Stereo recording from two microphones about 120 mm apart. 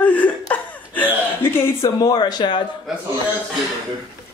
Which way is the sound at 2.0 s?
35° left (ahead or behind).